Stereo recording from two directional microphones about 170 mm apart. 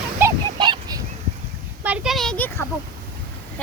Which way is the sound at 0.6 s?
30° right (ahead or behind).